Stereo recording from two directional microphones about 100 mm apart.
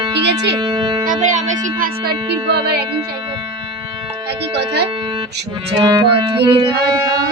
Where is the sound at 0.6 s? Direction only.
45° right (ahead or behind).